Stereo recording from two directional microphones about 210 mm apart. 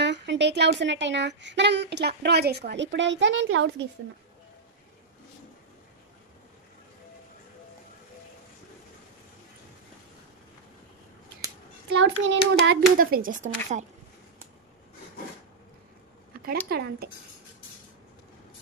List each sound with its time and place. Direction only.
0.0 s speech: 55° right (ahead or behind)
11.9 s speech: 60° right (ahead or behind)
12.6 s a woman's voice: 45° right (ahead or behind)
16.4 s speech: 50° right (ahead or behind)